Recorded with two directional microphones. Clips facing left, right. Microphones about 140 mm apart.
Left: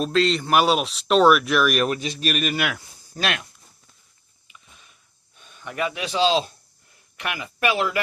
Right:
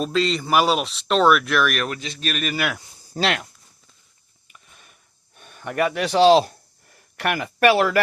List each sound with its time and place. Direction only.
0.0 s speech: centre (ahead or behind)
3.2 s speech: 30° right (ahead or behind)
4.4 s sniff: 50° right (ahead or behind)
5.4 s speech: 55° right (ahead or behind)
6.9 s speech: 55° right (ahead or behind)